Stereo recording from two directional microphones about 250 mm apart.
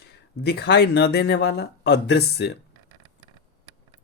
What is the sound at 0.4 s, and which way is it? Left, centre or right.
Speech, left.